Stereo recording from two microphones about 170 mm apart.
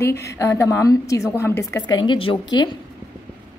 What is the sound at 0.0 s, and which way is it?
A woman's voice, 15° left (ahead or behind).